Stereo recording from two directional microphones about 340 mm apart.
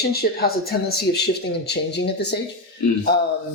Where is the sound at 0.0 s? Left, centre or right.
Left.